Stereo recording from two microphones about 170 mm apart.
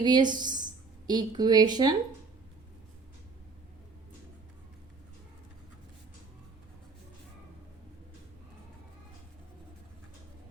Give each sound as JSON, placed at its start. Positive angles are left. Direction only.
{"t": 0.0, "sound": "a woman's voice", "side_deg": -25}